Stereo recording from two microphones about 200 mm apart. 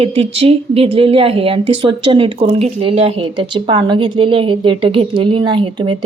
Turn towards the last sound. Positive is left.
turn(degrees=-25)  # may be behind; listen again after turning